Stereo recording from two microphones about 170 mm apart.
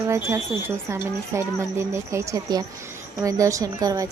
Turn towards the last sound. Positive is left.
turn(degrees=-20)  # may be behind; listen again after turning